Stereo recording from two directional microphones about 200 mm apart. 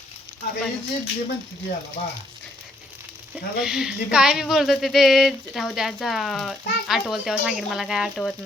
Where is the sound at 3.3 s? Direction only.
5° right (ahead or behind).